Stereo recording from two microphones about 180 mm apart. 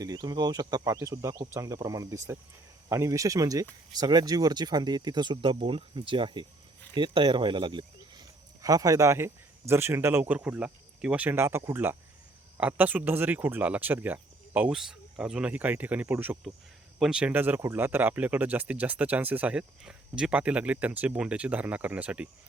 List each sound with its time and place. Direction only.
0.0 s speech: 20° right (ahead or behind)